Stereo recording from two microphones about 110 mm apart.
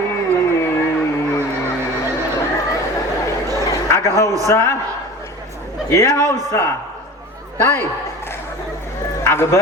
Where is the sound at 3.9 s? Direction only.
25° left (ahead or behind).